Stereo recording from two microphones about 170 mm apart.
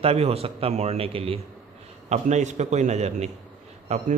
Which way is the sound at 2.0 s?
45° right (ahead or behind).